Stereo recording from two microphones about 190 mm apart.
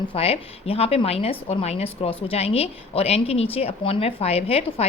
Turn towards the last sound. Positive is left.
turn(degrees=30)  # may be behind; listen again after turning